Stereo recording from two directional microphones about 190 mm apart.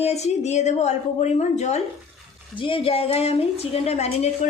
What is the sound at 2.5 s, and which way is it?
Speech, 25° left (ahead or behind).